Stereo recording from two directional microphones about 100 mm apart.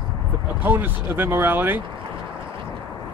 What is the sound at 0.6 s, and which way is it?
Speech, 20° right (ahead or behind).